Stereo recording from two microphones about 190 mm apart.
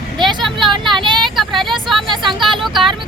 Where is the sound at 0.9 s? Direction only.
25° right (ahead or behind).